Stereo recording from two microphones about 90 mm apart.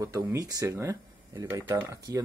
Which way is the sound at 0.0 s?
35° right (ahead or behind).